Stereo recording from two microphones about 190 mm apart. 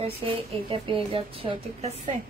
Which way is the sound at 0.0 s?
30° right (ahead or behind).